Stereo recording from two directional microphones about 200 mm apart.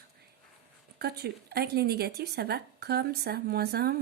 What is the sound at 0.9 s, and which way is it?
A woman's voice, 55° right (ahead or behind).